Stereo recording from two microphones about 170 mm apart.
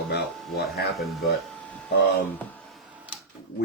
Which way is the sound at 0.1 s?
75° left (ahead or behind).